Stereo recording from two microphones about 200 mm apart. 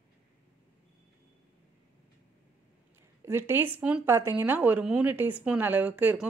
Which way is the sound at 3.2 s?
10° right (ahead or behind).